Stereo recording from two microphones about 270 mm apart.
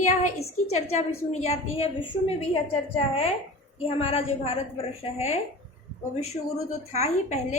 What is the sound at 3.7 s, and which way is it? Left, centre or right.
A woman's voice, left.